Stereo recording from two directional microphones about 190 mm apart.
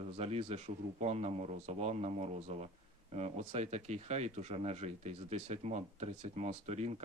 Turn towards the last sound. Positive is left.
turn(degrees=-35)  # may be behind; listen again after turning